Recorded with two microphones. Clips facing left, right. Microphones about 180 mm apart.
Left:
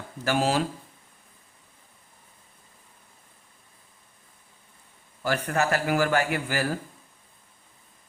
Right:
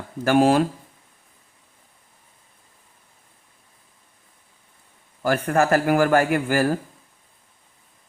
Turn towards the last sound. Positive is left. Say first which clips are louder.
# right 7 dB
turn(degrees=-50)  # may be behind; listen again after turning